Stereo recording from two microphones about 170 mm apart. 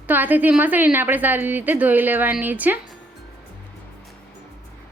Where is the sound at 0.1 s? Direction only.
10° right (ahead or behind).